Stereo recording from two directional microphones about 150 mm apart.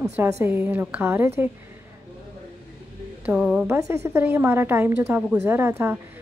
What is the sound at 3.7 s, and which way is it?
A woman's voice, 20° right (ahead or behind).